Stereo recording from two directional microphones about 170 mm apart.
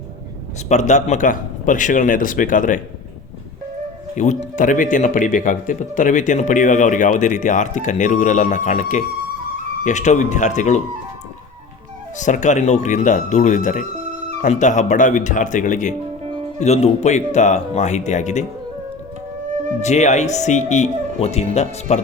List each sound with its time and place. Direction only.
0.7 s speech: 45° left (ahead or behind)
4.1 s speech: 45° left (ahead or behind)
12.1 s speech: 45° left (ahead or behind)
19.8 s speech: 40° left (ahead or behind)